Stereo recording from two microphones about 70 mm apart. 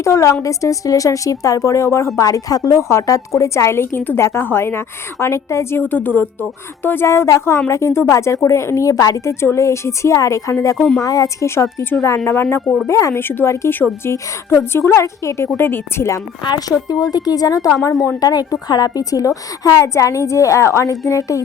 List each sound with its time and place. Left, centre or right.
0.0 s a woman's voice: left
2.1 s a woman's voice: left
5.8 s a woman's voice: left
10.8 s a woman's voice: centre
11.0 s a woman's voice: left
12.6 s speech: centre
12.9 s a woman's voice: left
13.1 s a woman's voice: left
15.5 s a woman's voice: left
16.4 s a woman's voice: left